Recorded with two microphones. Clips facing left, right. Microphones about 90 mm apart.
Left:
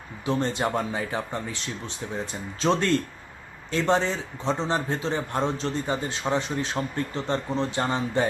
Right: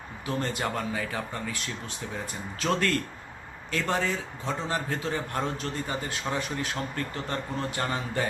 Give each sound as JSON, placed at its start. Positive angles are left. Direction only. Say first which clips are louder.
{"t": 0.3, "sound": "a man's voice", "louder": "left 5 dB", "side_deg": 25}